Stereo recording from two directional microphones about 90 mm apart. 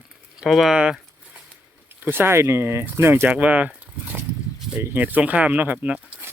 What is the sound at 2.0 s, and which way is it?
Speech, 25° right (ahead or behind).